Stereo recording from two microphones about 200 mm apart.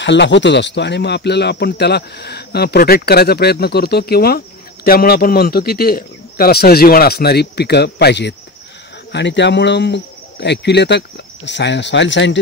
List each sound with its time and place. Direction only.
0.0 s speech: 60° left (ahead or behind)